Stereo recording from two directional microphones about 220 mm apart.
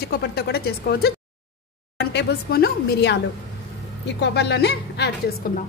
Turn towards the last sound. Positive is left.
turn(degrees=50)  # may be behind; listen again after turning